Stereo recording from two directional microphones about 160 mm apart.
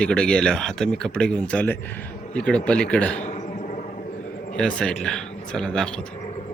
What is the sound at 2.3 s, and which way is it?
Speech, 5° left (ahead or behind).